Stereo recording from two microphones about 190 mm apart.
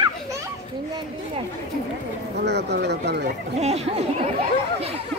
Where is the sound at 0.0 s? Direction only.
15° right (ahead or behind).